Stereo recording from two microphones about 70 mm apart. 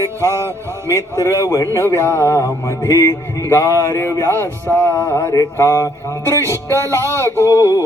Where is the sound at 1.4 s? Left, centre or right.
Left.